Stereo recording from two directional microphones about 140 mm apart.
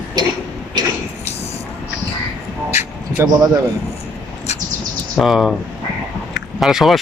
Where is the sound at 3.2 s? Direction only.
20° right (ahead or behind).